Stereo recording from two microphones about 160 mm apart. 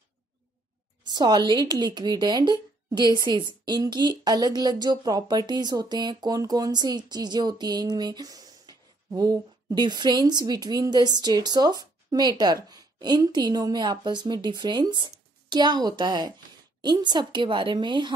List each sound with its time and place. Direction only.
1.0 s speech: 25° right (ahead or behind)